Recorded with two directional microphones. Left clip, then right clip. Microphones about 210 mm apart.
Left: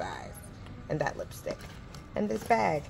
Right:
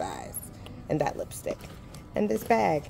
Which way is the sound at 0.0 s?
55° right (ahead or behind).